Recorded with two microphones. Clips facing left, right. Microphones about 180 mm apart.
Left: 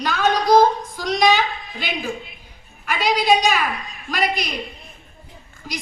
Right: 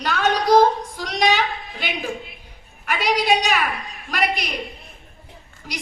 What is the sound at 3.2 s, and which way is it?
A woman's voice, 65° right (ahead or behind).